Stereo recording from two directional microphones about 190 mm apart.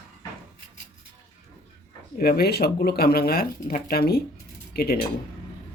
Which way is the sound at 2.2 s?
55° left (ahead or behind).